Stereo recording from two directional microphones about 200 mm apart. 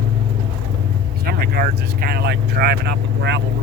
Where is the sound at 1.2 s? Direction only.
50° right (ahead or behind).